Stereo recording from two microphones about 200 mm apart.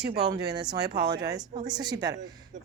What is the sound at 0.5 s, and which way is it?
A woman's voice, 20° right (ahead or behind).